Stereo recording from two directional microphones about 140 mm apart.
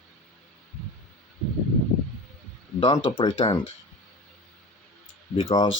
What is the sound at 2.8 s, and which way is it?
Speech, 35° left (ahead or behind).